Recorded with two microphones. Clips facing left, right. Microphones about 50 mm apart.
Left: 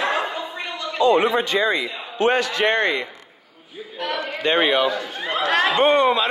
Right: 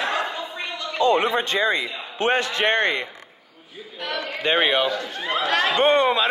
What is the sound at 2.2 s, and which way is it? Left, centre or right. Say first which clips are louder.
Speech: left 2 dB; right.